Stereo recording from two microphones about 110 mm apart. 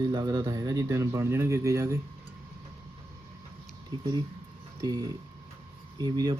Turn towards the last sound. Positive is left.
turn(degrees=-40)  # may be behind; listen again after turning